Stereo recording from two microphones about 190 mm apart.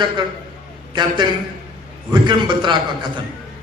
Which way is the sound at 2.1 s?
25° right (ahead or behind).